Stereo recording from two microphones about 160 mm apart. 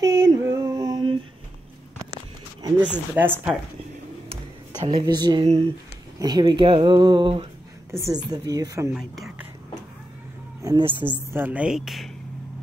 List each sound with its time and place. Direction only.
0.0 s female singing: 20° right (ahead or behind)
2.8 s speech: 10° right (ahead or behind)
4.3 s a sound: 35° right (ahead or behind)
6.1 s speech: 25° right (ahead or behind)
10.8 s speech: 30° right (ahead or behind)
11.3 s a woman's voice: 10° right (ahead or behind)